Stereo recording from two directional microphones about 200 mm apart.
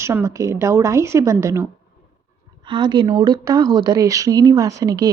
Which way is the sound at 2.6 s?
20° right (ahead or behind).